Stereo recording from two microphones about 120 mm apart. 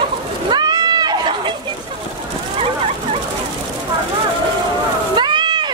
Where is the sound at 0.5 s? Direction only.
35° right (ahead or behind).